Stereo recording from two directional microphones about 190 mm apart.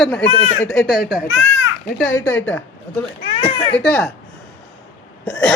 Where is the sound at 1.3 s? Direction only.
85° left.